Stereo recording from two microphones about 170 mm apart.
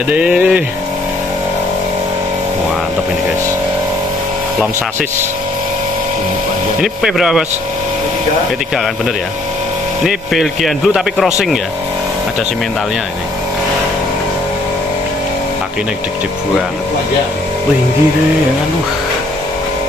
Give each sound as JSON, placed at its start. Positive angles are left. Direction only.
{"t": 0.1, "sound": "speech", "side_deg": -10}
{"t": 6.8, "sound": "speech", "side_deg": -5}
{"t": 10.0, "sound": "speech", "side_deg": 0}